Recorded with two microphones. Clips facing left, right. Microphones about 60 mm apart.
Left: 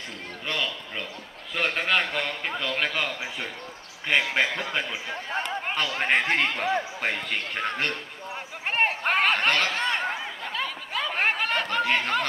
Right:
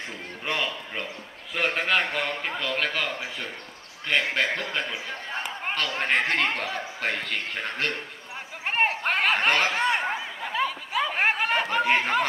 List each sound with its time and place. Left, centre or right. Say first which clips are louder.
0.5 s a sound: right 1 dB; right
1.8 s a man's voice: even; centre
4.1 s a man's voice: left 1 dB; centre
8.6 s snicker: even; centre